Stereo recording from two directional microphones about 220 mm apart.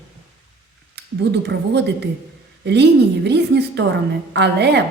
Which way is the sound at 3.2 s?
50° right (ahead or behind).